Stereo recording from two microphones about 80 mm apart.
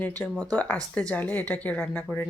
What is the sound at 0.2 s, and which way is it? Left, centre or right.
A woman's voice, centre.